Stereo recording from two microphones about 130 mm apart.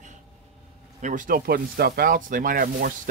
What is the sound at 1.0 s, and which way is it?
Speech, 85° right.